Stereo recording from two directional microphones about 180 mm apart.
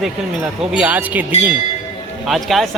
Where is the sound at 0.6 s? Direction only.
5° right (ahead or behind).